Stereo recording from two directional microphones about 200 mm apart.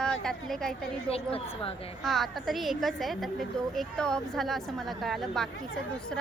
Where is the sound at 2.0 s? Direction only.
Centre (ahead or behind).